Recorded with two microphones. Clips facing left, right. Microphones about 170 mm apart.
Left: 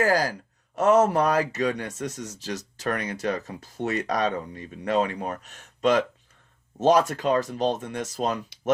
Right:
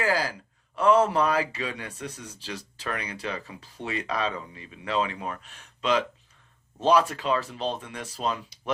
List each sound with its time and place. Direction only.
0.0 s speech: 45° left (ahead or behind)